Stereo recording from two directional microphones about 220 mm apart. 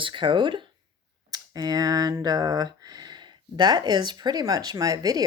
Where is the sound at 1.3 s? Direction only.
15° right (ahead or behind).